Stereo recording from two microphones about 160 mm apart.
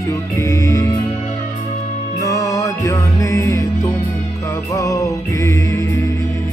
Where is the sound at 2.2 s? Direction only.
20° left (ahead or behind).